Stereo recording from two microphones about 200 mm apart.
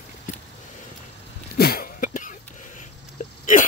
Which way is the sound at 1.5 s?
50° left (ahead or behind).